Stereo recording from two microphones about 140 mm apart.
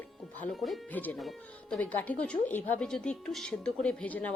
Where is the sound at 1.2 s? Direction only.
Centre (ahead or behind).